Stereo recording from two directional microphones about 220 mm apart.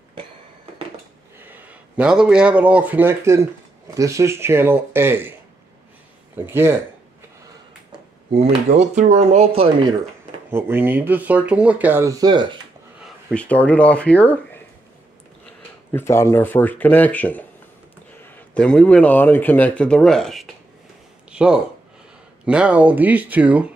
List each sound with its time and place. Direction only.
1.4 s speech: 10° right (ahead or behind)
6.4 s speech: 10° right (ahead or behind)
8.4 s speech: 30° right (ahead or behind)
10.5 s speech: 10° right (ahead or behind)
13.0 s speech: 5° left (ahead or behind)
15.9 s a man's voice: 10° left (ahead or behind); by 23.7 s 5° right (ahead or behind)